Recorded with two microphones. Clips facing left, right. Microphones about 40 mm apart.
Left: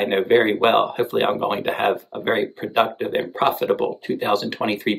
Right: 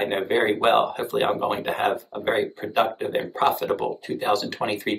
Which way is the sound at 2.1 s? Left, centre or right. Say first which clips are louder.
Left 2 dB; left.